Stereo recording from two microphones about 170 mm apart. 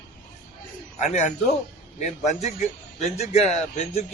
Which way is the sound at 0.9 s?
40° left (ahead or behind).